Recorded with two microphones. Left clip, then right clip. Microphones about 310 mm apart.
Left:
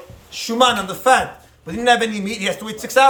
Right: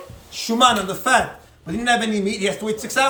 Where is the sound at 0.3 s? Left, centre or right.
Centre.